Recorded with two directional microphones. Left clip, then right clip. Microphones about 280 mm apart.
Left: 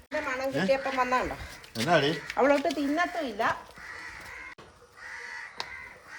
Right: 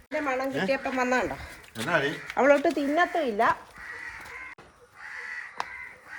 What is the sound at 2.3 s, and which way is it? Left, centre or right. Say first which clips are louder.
Speech: right 4 dB; right.